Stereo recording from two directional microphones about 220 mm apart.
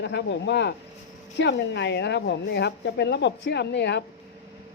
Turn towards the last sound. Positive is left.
turn(degrees=50)  # may be behind; listen again after turning